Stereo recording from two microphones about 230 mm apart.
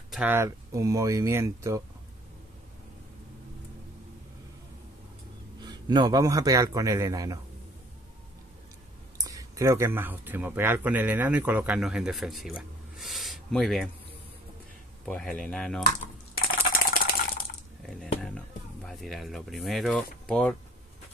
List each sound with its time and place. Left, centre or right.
0.1 s a man's voice: centre
5.6 s a man's voice: centre
9.2 s speech: centre
15.0 s speech: centre
16.3 s typing: left
18.2 s a sound: centre